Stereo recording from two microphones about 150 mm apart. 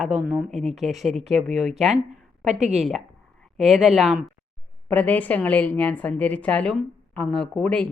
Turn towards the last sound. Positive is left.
turn(degrees=5)  # may be behind; listen again after turning